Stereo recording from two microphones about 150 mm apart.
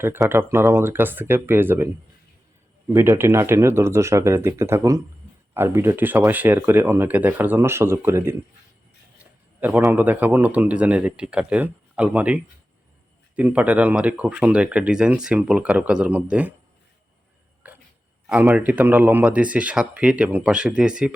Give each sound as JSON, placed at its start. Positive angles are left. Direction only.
{"t": 0.0, "sound": "speech", "side_deg": -15}
{"t": 2.9, "sound": "speech", "side_deg": -15}
{"t": 9.6, "sound": "a man's voice", "side_deg": -10}
{"t": 17.6, "sound": "a sound", "side_deg": -10}
{"t": 18.3, "sound": "speech", "side_deg": -5}